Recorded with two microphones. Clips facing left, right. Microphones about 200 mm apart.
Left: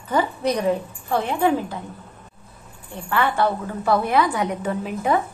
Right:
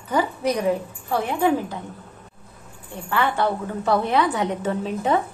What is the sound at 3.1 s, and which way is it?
A woman's voice, 15° right (ahead or behind).